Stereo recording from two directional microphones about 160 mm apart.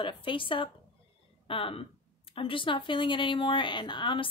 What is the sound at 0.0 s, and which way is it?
Speech, 30° left (ahead or behind).